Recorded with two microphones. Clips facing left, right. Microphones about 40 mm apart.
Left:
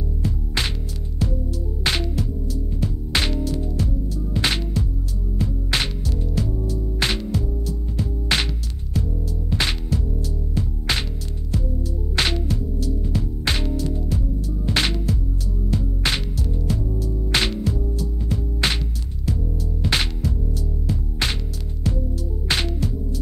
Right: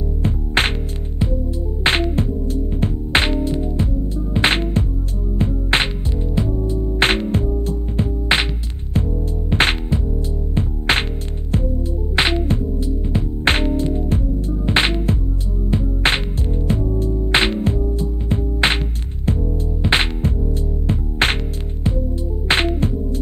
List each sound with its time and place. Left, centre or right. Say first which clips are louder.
0.2 s music: right 7 dB; right
1.8 s music: right 6 dB; right
9.5 s music: right 7 dB; right
12.2 s music: right 5 dB; right
19.8 s music: right 5 dB; right
22.5 s music: right 7 dB; right